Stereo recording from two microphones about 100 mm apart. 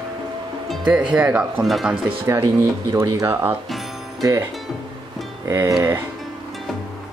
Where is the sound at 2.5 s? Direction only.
30° right (ahead or behind).